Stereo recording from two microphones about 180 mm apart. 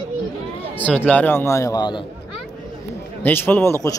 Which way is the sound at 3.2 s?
10° left (ahead or behind).